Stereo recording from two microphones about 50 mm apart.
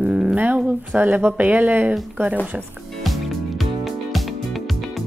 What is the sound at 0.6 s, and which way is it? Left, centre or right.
Speech, right.